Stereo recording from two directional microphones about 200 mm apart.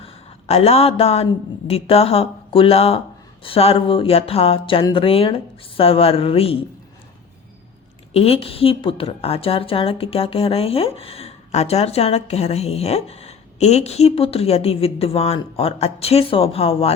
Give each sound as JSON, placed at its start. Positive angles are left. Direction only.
{"t": 0.0, "sound": "a woman's voice", "side_deg": 30}
{"t": 8.1, "sound": "a woman's voice", "side_deg": 30}